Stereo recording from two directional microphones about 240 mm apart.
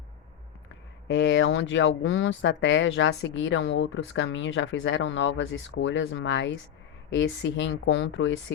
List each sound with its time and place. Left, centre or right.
1.0 s speech: left